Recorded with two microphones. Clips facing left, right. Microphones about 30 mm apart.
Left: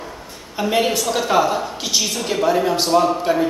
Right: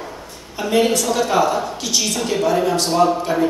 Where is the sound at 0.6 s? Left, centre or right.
Centre.